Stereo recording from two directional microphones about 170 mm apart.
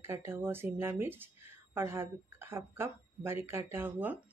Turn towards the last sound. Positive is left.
turn(degrees=-10)  # may be behind; listen again after turning